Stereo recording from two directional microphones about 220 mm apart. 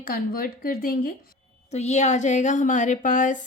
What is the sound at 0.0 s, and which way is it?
Speech, 40° left (ahead or behind).